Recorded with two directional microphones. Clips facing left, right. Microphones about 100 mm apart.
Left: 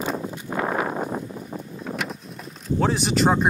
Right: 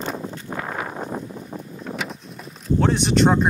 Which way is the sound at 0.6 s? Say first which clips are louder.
Left 6 dB; 30° left (ahead or behind).